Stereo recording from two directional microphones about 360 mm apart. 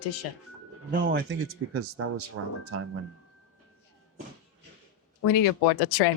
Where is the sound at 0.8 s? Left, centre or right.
Right.